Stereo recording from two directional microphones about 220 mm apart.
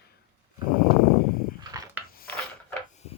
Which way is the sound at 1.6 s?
15° right (ahead or behind).